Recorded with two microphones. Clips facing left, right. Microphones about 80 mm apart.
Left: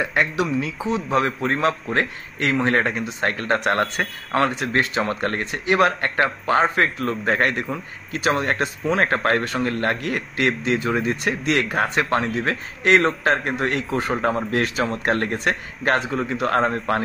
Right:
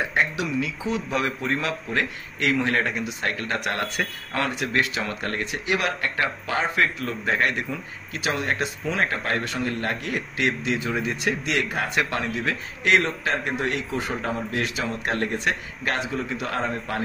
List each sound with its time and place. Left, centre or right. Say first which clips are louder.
0.1 s speech: left 3 dB; left
0.8 s speech: left 7 dB; left